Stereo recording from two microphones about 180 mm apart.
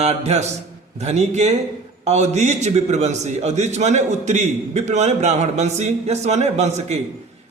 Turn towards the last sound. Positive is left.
turn(degrees=-40)  # may be behind; listen again after turning